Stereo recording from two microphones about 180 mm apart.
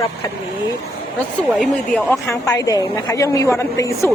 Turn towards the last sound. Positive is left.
turn(degrees=15)  # may be behind; listen again after turning